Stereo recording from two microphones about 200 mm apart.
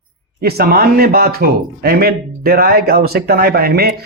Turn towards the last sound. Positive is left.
turn(degrees=-50)  # may be behind; listen again after turning